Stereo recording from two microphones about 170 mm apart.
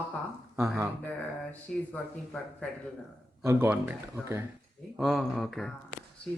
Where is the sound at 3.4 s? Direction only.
15° right (ahead or behind).